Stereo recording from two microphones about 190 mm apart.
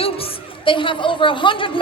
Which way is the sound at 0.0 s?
30° left (ahead or behind).